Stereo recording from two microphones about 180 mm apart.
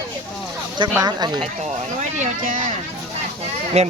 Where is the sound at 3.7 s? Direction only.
35° right (ahead or behind).